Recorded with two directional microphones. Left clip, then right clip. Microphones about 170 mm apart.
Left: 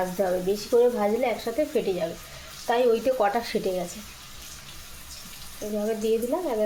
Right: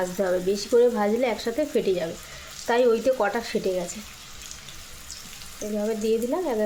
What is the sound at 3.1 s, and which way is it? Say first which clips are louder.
Speech: even; 15° right (ahead or behind).